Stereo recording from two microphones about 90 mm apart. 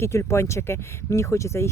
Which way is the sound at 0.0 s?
30° left (ahead or behind).